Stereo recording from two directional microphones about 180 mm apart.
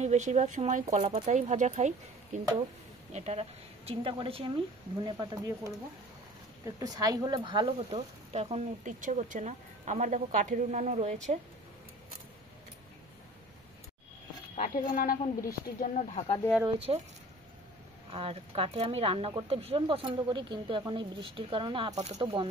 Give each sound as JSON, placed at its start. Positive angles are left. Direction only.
{"t": 0.0, "sound": "speech", "side_deg": -40}
{"t": 14.6, "sound": "speech", "side_deg": 50}
{"t": 16.9, "sound": "speech", "side_deg": -30}
{"t": 18.1, "sound": "speech", "side_deg": -30}